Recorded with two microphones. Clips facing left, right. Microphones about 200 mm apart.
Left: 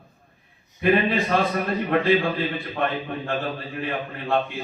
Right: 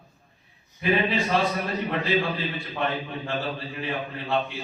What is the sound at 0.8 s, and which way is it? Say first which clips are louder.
Mantra: left 4 dB; 55° left (ahead or behind).